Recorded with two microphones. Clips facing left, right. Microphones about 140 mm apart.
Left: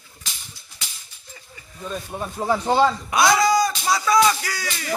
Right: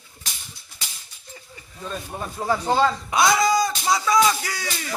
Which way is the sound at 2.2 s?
10° left (ahead or behind).